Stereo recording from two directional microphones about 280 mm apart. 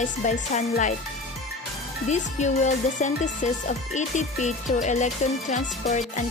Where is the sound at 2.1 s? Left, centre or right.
Left.